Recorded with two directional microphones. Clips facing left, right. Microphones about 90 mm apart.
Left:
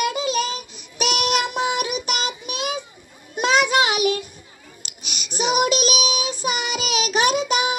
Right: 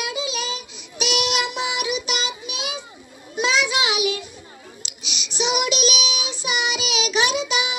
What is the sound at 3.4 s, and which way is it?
Child singing, 50° left (ahead or behind).